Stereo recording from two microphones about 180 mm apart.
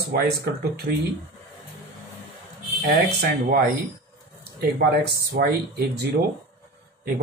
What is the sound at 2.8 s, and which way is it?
Speech, 50° right (ahead or behind).